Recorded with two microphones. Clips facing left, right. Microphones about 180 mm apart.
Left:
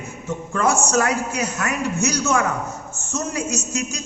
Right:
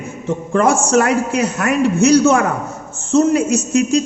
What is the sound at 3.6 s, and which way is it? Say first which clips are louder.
Speech: right 12 dB; 60° right (ahead or behind).